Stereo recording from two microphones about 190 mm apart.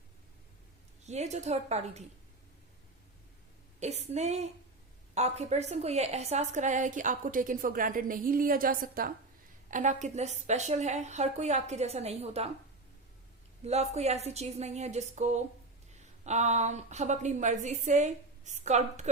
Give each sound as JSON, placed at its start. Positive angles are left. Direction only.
{"t": 1.0, "sound": "a woman's voice", "side_deg": -35}
{"t": 3.8, "sound": "a woman's voice", "side_deg": -35}
{"t": 13.7, "sound": "a woman's voice", "side_deg": -35}